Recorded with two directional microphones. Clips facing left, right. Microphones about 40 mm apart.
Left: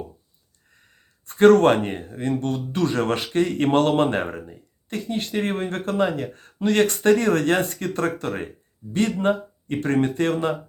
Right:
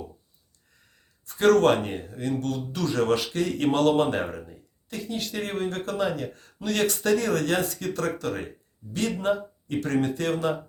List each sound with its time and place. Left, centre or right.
1.2 s speech: left